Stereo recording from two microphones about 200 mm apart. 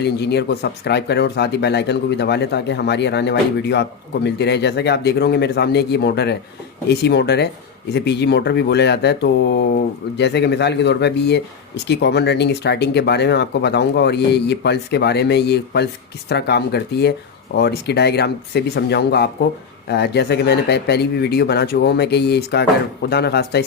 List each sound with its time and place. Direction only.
0.0 s speech: 55° left (ahead or behind)